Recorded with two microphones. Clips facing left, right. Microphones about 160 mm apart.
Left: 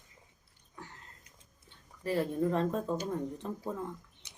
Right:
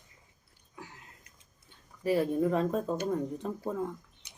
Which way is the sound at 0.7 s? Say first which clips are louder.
Right 1 dB; 10° right (ahead or behind).